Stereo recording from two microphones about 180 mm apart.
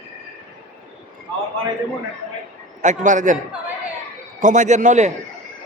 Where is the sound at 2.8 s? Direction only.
45° right (ahead or behind).